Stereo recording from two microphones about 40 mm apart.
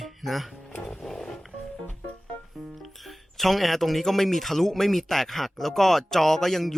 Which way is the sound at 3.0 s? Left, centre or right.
Centre.